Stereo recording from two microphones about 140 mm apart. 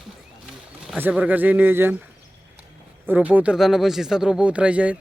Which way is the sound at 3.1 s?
10° right (ahead or behind).